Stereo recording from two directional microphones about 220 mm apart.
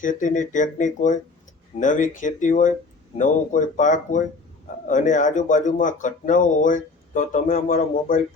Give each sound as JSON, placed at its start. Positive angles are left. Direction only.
{"t": 0.0, "sound": "speech", "side_deg": 35}